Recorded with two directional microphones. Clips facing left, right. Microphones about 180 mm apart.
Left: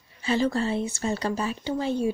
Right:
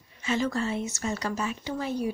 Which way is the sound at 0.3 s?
30° left (ahead or behind).